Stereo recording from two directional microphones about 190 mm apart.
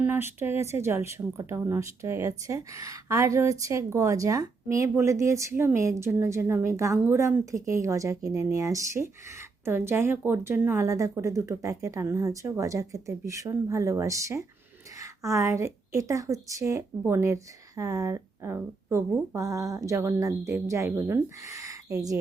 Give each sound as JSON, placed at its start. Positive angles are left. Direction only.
{"t": 0.0, "sound": "speech", "side_deg": -10}